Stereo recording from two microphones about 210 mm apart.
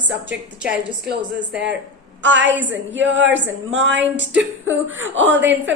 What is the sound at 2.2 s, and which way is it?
A woman's voice, 60° right (ahead or behind).